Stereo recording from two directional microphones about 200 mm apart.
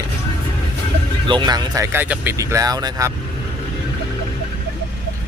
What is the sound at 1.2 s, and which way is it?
Speech, 25° right (ahead or behind).